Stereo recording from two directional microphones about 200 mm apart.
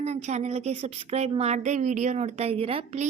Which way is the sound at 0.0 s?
35° right (ahead or behind).